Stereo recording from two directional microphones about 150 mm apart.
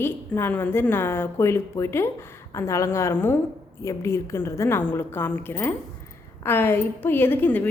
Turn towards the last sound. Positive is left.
turn(degrees=15)  # may be behind; listen again after turning